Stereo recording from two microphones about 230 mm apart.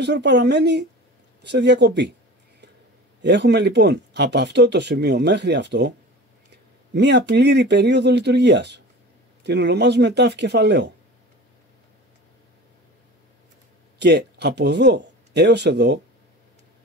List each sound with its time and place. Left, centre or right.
0.0 s speech: right
3.2 s speech: right
13.9 s speech: right